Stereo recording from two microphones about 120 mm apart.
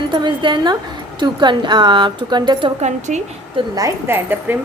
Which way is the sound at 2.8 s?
80° right.